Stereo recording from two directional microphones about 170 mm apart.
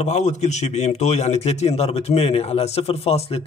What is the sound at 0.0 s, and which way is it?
A man's voice, 40° left (ahead or behind).